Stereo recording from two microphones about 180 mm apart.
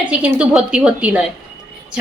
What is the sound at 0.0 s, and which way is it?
A woman's voice, 10° right (ahead or behind).